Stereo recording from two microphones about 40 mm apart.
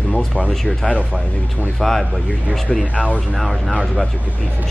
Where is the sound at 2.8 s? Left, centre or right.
Left.